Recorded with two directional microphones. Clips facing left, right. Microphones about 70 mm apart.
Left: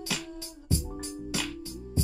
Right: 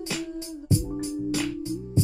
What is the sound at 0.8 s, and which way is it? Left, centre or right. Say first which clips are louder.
Music: right 8 dB; centre.